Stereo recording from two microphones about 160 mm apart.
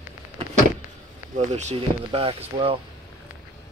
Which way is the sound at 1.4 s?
45° right (ahead or behind).